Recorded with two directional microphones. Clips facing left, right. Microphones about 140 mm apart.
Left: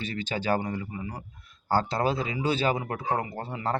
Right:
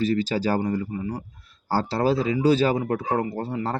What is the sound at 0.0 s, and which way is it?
Speech, 35° right (ahead or behind).